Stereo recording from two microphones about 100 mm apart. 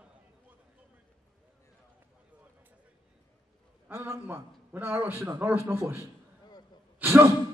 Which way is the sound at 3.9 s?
20° right (ahead or behind).